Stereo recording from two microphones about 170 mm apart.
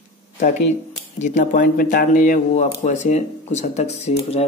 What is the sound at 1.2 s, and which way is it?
Speech, 45° left (ahead or behind).